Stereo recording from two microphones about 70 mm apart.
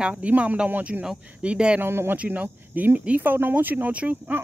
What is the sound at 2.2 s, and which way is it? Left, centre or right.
Speech, right.